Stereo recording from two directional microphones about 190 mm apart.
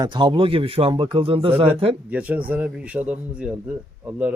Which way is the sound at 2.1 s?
10° right (ahead or behind).